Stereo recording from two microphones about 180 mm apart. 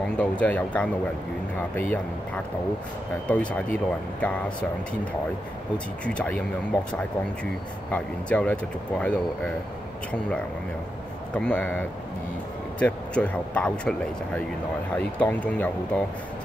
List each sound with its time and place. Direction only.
0.2 s speech: 5° left (ahead or behind)
6.0 s speech: 5° left (ahead or behind)
7.9 s speech: 10° left (ahead or behind)
11.3 s speech: 5° left (ahead or behind)
15.0 s speech: 10° left (ahead or behind)